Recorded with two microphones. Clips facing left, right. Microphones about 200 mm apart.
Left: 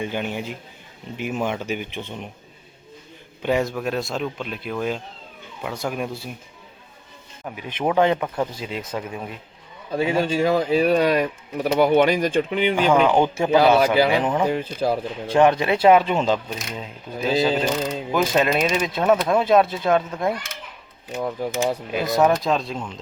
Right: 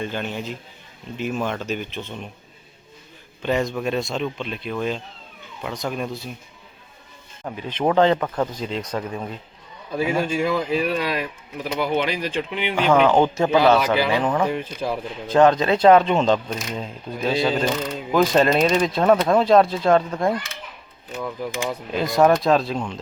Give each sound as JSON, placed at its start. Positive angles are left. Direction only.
{"t": 0.0, "sound": "speech", "side_deg": 15}
{"t": 3.4, "sound": "speech", "side_deg": 10}
{"t": 7.4, "sound": "speech", "side_deg": 10}
{"t": 9.9, "sound": "speech", "side_deg": 30}
{"t": 12.7, "sound": "speech", "side_deg": 10}
{"t": 14.6, "sound": "speech", "side_deg": 35}
{"t": 15.3, "sound": "speech", "side_deg": 15}
{"t": 18.1, "sound": "speech", "side_deg": 5}
{"t": 21.2, "sound": "speech", "side_deg": 40}
{"t": 21.9, "sound": "speech", "side_deg": 0}